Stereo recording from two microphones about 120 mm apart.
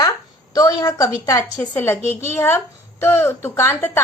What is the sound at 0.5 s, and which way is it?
Speech, 35° left (ahead or behind).